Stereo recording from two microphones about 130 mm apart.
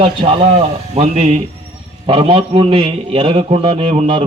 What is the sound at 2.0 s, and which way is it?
Speech, 45° right (ahead or behind).